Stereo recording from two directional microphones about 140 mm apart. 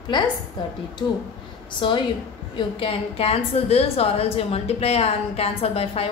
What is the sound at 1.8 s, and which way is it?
A woman's voice, 35° left (ahead or behind).